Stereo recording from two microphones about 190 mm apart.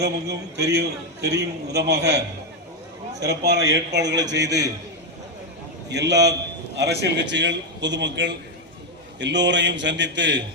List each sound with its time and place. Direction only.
0.0 s a man's voice: 60° right (ahead or behind)
5.9 s a man's voice: 65° right (ahead or behind)